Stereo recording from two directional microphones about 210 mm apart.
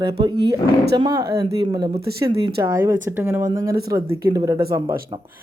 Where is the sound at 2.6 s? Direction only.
10° right (ahead or behind).